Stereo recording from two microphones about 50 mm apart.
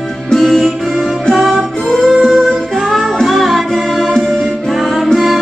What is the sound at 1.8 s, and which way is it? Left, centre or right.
Music, centre.